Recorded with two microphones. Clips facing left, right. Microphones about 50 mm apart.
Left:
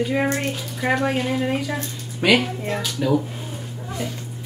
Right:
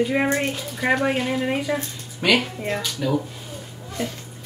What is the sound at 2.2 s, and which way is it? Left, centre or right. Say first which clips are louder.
Speech: left 2 dB; centre.